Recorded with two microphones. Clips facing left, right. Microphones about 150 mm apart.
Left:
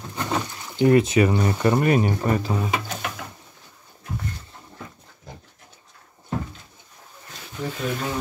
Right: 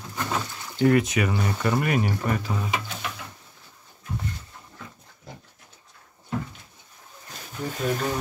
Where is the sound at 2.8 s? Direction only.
45° left (ahead or behind).